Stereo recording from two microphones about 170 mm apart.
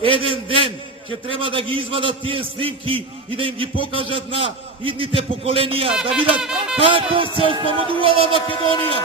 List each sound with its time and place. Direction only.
0.0 s a man's voice: 30° right (ahead or behind)
5.9 s speech: 5° right (ahead or behind)
6.7 s a man's voice: 30° right (ahead or behind)
8.3 s speech: 30° left (ahead or behind)